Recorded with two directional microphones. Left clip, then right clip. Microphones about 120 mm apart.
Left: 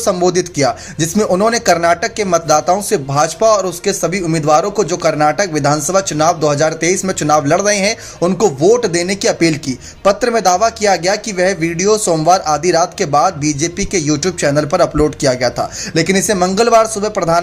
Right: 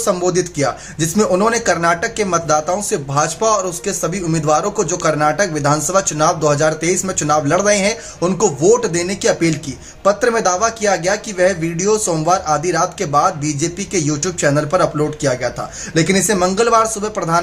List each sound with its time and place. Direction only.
0.0 s speech: 40° left (ahead or behind)